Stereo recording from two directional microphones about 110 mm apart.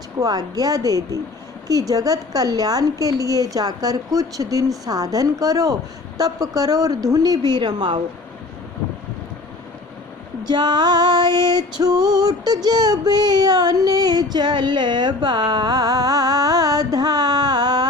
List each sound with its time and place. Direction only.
0.2 s child singing: 35° right (ahead or behind)
10.4 s child singing: 40° right (ahead or behind)